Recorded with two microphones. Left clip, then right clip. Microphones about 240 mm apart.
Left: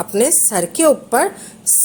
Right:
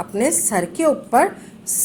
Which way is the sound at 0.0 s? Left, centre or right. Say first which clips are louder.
Left 4 dB; left.